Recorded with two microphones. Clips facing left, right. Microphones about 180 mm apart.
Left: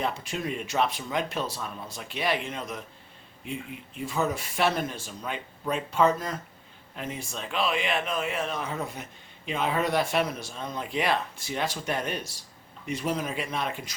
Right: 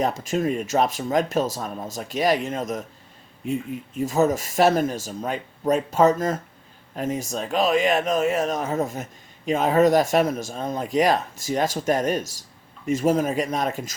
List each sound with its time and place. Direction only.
0.0 s speech: 40° right (ahead or behind)